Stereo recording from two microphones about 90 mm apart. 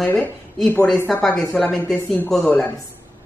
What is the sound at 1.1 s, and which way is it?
A woman's voice, centre (ahead or behind).